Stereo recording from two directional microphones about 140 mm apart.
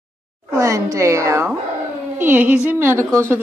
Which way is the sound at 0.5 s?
20° right (ahead or behind).